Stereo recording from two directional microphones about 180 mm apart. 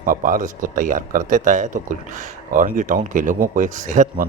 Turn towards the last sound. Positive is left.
turn(degrees=-45)  # may be behind; listen again after turning